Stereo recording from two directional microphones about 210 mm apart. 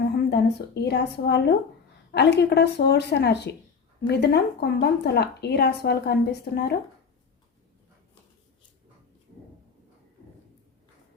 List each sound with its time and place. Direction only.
0.3 s a woman's voice: 50° left (ahead or behind)